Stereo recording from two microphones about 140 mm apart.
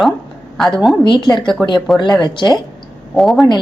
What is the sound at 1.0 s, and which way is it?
Speech, 35° left (ahead or behind).